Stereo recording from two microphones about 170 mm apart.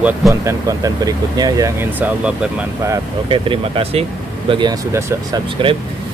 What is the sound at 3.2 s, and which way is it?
Speech, 30° right (ahead or behind).